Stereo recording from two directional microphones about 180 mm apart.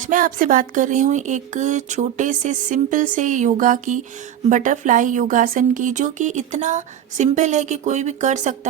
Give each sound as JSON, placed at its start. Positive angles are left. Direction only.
{"t": 0.0, "sound": "speech", "side_deg": -50}